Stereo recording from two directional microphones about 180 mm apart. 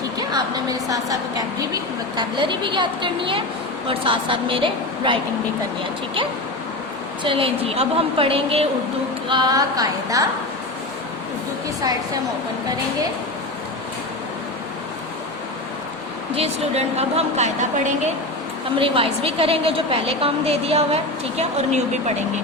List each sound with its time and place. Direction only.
0.2 s a woman's voice: 20° right (ahead or behind)
7.3 s a woman's voice: 30° right (ahead or behind)
16.3 s a woman's voice: 35° right (ahead or behind)